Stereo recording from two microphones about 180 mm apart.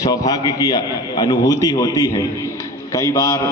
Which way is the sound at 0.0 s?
20° left (ahead or behind).